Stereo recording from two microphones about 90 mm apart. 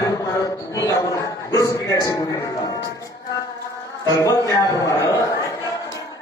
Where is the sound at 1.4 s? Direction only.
40° left (ahead or behind).